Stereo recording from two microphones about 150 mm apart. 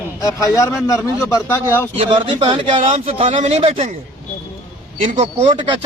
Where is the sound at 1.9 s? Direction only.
35° right (ahead or behind).